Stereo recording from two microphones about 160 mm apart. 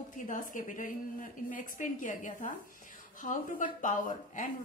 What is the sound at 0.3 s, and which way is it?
A woman's voice, 55° left (ahead or behind).